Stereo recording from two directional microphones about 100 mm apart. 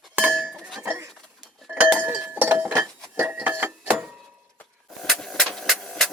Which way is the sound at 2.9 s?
5° left (ahead or behind).